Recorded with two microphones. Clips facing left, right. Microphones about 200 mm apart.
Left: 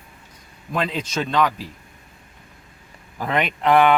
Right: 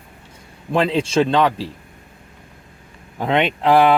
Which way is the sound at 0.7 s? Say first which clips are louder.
Right 8 dB; 30° right (ahead or behind).